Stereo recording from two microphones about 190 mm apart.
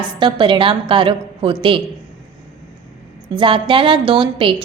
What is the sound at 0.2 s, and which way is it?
A woman's voice, 25° right (ahead or behind).